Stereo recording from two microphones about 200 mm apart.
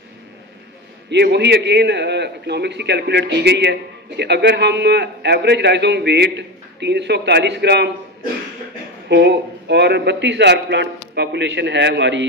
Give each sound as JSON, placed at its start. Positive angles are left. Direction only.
{"t": 1.1, "sound": "a man's voice", "side_deg": -60}
{"t": 9.1, "sound": "a man's voice", "side_deg": -60}